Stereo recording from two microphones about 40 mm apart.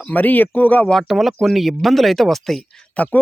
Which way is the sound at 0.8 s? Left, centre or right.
Centre.